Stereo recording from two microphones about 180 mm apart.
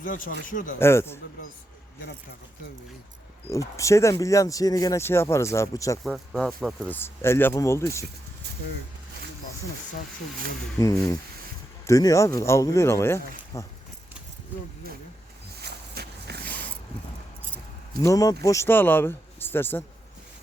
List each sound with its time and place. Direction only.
0.0 s speech: 50° left (ahead or behind)
0.8 s speech: 15° left (ahead or behind)
3.5 s speech: 15° left (ahead or behind)
6.0 s speech: centre (ahead or behind)
6.8 s speech: 10° left (ahead or behind)
10.8 s a sound: 20° left (ahead or behind)
11.9 s speech: 20° left (ahead or behind)
15.6 s a sound: 65° right (ahead or behind)
18.0 s a sound: 20° left (ahead or behind)
18.4 s speech: 15° left (ahead or behind)